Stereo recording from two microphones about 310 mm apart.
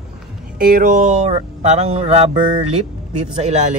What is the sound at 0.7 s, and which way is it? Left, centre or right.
A man's voice, right.